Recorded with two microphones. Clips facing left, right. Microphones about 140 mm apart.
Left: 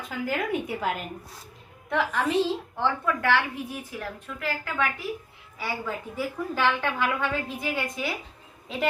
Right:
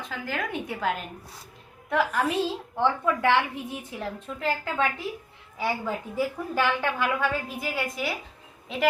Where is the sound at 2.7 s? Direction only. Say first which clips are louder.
Right 2 dB; 15° right (ahead or behind).